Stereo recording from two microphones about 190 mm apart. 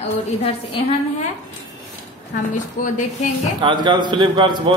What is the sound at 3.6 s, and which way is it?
A man's voice, 25° right (ahead or behind).